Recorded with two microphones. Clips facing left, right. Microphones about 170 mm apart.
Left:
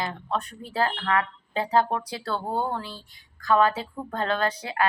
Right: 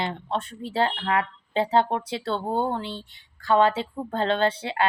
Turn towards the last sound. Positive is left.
turn(degrees=-30)  # may be behind; listen again after turning